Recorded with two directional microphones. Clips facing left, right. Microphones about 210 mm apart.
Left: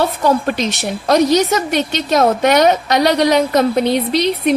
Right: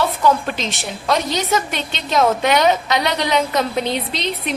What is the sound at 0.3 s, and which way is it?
A woman's voice, 40° left (ahead or behind).